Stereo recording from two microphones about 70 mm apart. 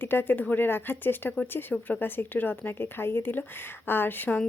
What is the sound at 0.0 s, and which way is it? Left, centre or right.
Speech, left.